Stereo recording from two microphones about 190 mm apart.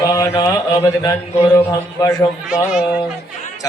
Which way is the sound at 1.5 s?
20° left (ahead or behind).